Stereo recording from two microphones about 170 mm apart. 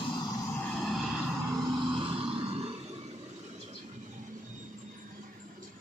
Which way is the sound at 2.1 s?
35° right (ahead or behind).